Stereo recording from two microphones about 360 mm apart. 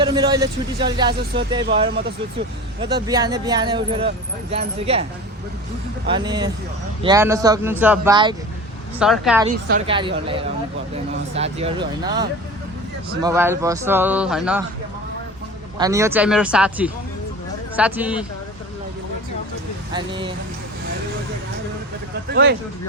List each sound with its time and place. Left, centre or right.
0.0 s speech: centre
1.9 s speech: right
3.1 s speech: centre
6.1 s speech: centre
9.6 s speech: centre
13.2 s speech: centre
15.8 s speech: centre
19.9 s speech: centre
22.3 s speech: right